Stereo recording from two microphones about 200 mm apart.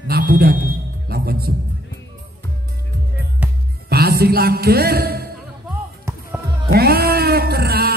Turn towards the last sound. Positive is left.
turn(degrees=-50)  # may be behind; listen again after turning